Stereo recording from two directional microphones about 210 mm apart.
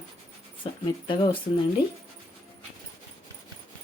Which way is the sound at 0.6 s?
25° left (ahead or behind).